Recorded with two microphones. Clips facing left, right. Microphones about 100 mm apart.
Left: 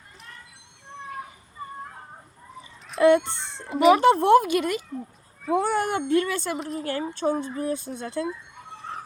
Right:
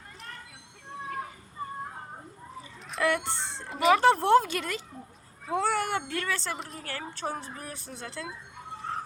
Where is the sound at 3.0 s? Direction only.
25° left (ahead or behind).